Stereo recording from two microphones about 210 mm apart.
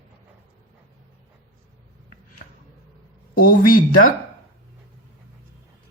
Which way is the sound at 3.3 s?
45° left (ahead or behind).